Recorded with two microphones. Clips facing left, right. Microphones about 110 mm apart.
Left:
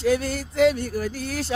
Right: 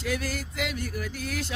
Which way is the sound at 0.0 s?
30° left (ahead or behind).